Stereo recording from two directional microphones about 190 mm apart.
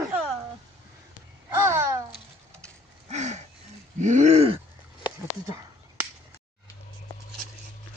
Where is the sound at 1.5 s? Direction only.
15° right (ahead or behind).